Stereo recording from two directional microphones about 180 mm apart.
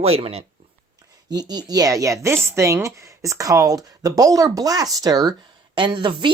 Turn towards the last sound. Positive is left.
turn(degrees=-25)  # may be behind; listen again after turning